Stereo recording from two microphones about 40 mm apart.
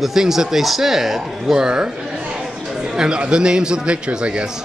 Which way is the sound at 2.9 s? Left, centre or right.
Right.